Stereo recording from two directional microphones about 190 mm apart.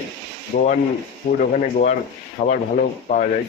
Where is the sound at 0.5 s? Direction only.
45° left (ahead or behind).